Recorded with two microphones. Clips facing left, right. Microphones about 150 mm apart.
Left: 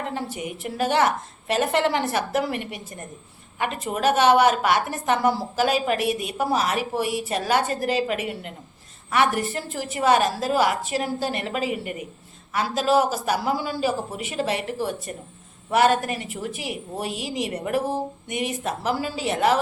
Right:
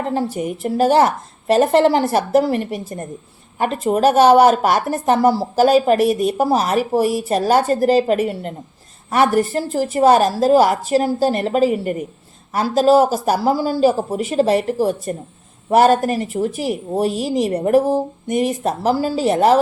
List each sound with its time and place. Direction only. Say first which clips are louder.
0.1 s a woman's voice: right 9 dB; 35° right (ahead or behind)